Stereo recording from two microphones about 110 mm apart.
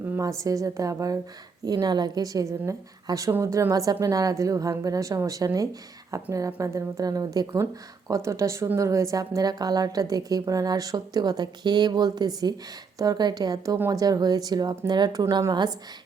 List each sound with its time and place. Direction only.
0.0 s a woman's voice: 25° right (ahead or behind)